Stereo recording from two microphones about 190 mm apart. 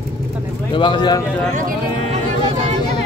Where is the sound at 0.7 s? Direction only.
25° left (ahead or behind).